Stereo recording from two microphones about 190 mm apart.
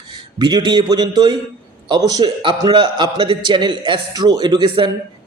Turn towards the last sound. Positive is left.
turn(degrees=-25)  # may be behind; listen again after turning